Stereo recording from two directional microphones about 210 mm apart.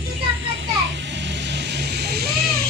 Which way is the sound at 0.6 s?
60° right (ahead or behind).